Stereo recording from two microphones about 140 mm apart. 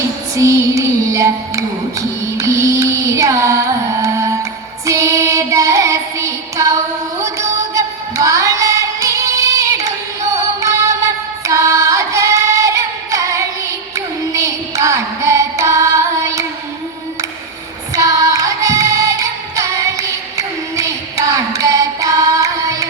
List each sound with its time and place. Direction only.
0.3 s music: 20° right (ahead or behind)
4.9 s child singing: 20° right (ahead or behind)
7.2 s music: 20° right (ahead or behind)
11.4 s singing: 20° right (ahead or behind)
17.9 s music: 25° right (ahead or behind)